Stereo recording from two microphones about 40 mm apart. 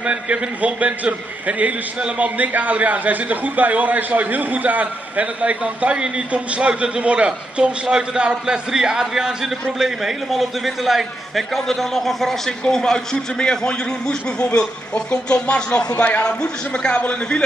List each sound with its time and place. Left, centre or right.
0.0 s a man's voice: right
5.9 s a man's voice: right; by 17.4 s left